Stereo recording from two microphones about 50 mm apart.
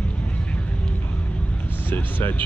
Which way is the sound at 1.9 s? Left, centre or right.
Left.